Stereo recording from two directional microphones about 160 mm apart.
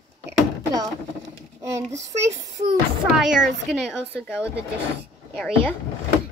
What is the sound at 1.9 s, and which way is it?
Speech, 20° right (ahead or behind).